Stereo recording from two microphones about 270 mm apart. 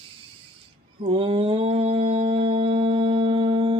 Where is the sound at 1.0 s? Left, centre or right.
Centre.